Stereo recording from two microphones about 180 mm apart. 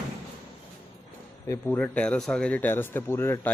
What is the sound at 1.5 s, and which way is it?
Speech, 10° left (ahead or behind).